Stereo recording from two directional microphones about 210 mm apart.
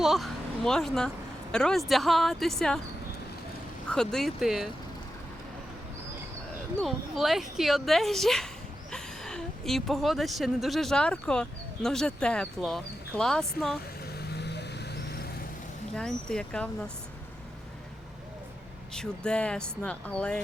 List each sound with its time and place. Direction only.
0.0 s speech: centre (ahead or behind)
3.8 s speech: centre (ahead or behind)
6.8 s speech: centre (ahead or behind)
14.2 s vehicle: 55° left (ahead or behind)
16.0 s speech: 5° left (ahead or behind)
18.9 s speech: 5° left (ahead or behind)